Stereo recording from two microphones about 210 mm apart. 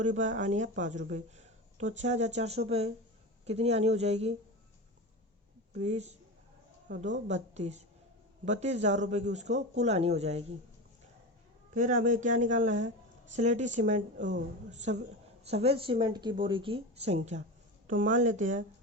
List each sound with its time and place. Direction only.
0.0 s speech: 35° right (ahead or behind)
5.7 s speech: 35° right (ahead or behind)
11.7 s speech: 40° right (ahead or behind)